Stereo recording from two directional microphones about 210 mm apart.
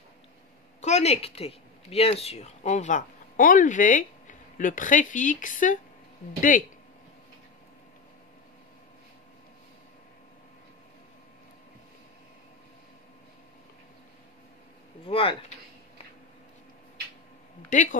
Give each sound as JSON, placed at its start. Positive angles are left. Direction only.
{"t": 0.7, "sound": "speech", "side_deg": 35}
{"t": 15.0, "sound": "a sound", "side_deg": 25}
{"t": 17.7, "sound": "speech", "side_deg": 35}